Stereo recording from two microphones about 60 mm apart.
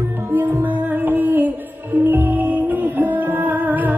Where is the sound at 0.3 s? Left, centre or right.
Right.